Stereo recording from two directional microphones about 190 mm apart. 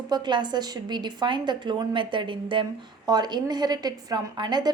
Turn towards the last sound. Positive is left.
turn(degrees=-25)  # may be behind; listen again after turning